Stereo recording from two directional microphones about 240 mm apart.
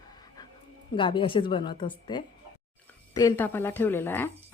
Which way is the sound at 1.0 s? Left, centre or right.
Left.